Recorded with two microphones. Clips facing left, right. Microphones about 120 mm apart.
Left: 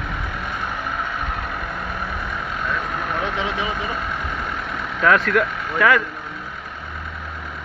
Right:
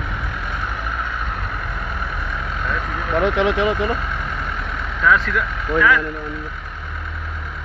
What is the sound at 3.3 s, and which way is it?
Speech, 70° right (ahead or behind).